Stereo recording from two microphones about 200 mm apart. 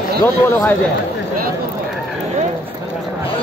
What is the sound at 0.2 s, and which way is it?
Speech, 10° left (ahead or behind).